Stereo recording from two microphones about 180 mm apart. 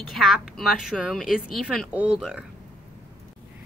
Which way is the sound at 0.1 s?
Centre (ahead or behind).